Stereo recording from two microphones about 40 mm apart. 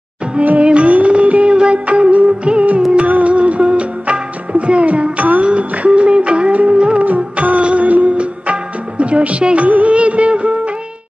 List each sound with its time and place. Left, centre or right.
0.4 s music: right
0.7 s music of bollywood: right
3.1 s music: right
7.2 s music of bollywood: right